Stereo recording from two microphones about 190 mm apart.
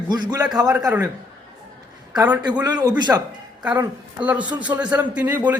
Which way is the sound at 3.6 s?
5° right (ahead or behind).